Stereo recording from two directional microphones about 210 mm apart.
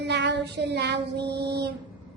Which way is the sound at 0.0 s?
55° right (ahead or behind).